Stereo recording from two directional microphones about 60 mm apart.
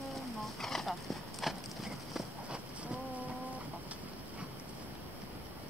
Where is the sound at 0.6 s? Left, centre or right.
Centre.